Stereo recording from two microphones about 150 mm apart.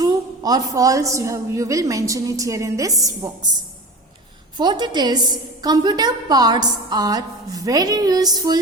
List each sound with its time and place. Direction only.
0.0 s a woman's voice: 25° right (ahead or behind)
4.5 s a woman's voice: 30° right (ahead or behind)